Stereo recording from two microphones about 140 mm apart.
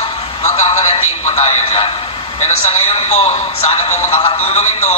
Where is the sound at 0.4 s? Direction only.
50° left (ahead or behind).